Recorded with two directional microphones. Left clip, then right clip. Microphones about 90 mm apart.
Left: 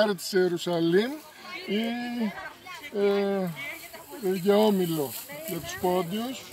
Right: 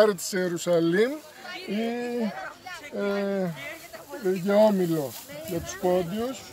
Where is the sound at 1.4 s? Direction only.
25° right (ahead or behind).